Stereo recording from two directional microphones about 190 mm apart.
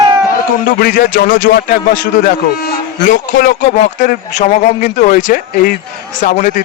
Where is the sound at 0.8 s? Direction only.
45° left (ahead or behind).